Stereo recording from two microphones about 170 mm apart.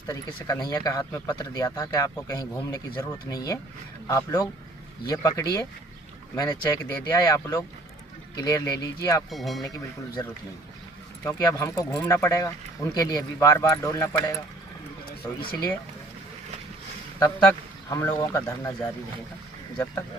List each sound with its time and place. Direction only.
0.1 s speech: 20° left (ahead or behind)
9.3 s speech: centre (ahead or behind)
11.2 s speech: 15° left (ahead or behind)
17.2 s speech: 15° left (ahead or behind)